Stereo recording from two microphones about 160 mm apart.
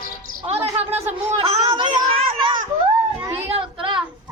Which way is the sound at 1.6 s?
25° right (ahead or behind).